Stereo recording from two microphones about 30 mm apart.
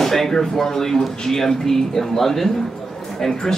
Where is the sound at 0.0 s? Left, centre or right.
Centre.